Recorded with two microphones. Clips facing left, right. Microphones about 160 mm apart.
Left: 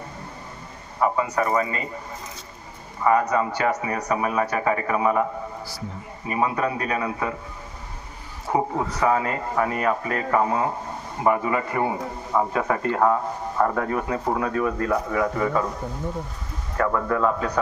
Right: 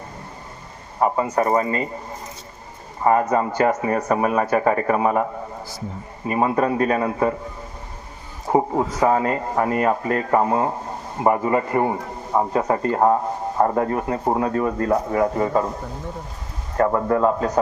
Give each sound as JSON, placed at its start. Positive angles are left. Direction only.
{"t": 0.9, "sound": "a man's voice", "side_deg": -40}
{"t": 3.0, "sound": "a man's voice", "side_deg": -40}
{"t": 6.2, "sound": "a man's voice", "side_deg": -40}
{"t": 8.5, "sound": "a sound", "side_deg": -40}
{"t": 9.0, "sound": "a man's voice", "side_deg": -35}
{"t": 16.7, "sound": "a man's voice", "side_deg": -35}